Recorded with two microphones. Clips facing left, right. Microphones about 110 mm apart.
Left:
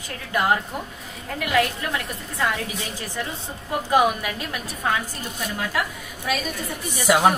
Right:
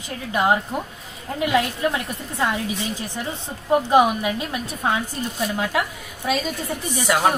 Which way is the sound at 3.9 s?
20° right (ahead or behind).